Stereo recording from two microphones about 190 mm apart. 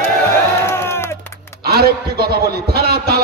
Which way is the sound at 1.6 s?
55° right (ahead or behind).